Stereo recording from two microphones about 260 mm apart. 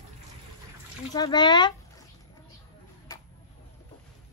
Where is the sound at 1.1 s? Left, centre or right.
Centre.